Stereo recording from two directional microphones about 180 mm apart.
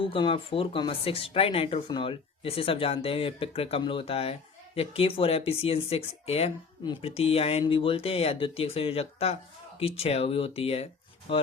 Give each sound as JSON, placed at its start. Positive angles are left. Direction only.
{"t": 0.0, "sound": "speech", "side_deg": 30}